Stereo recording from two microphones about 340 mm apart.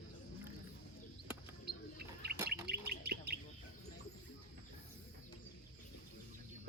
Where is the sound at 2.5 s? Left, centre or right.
Right.